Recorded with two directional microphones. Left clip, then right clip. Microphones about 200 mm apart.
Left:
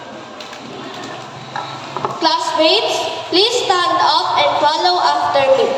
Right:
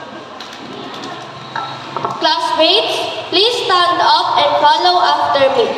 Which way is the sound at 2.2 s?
15° right (ahead or behind).